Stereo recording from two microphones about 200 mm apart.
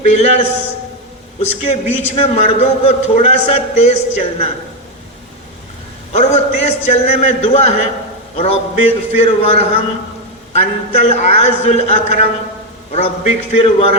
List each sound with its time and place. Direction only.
0.0 s a man's voice: 35° left (ahead or behind)
6.1 s a man's voice: 35° left (ahead or behind)